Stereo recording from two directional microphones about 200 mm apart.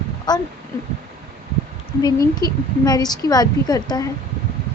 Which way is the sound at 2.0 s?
20° left (ahead or behind).